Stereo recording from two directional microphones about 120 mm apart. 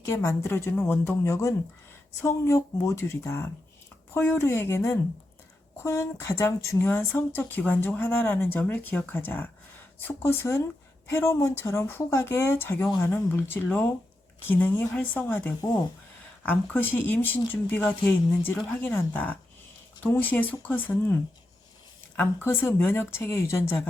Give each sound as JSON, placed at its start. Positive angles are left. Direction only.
{"t": 0.0, "sound": "speech", "side_deg": 25}
{"t": 22.1, "sound": "speech", "side_deg": 15}